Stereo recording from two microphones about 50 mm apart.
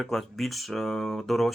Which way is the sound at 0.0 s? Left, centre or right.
Centre.